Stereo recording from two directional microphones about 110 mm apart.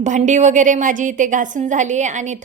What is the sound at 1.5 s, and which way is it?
Speech, 90° right.